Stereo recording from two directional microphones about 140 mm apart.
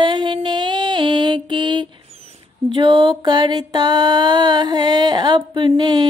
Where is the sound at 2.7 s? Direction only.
35° right (ahead or behind).